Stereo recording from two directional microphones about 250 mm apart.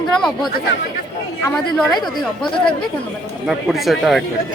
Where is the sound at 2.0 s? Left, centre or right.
Centre.